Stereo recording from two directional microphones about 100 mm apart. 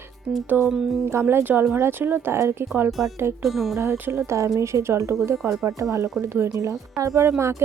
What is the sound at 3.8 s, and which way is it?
A woman's voice, 20° right (ahead or behind).